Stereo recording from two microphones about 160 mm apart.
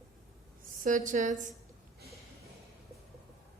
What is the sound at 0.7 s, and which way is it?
Speech, 55° right (ahead or behind).